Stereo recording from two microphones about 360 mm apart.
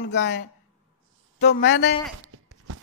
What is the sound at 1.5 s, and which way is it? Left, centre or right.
Speech, left.